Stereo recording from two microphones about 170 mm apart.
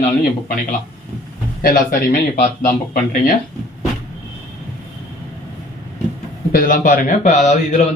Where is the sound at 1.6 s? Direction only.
60° left (ahead or behind).